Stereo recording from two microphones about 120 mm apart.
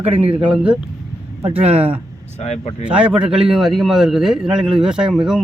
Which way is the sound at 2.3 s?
65° left (ahead or behind).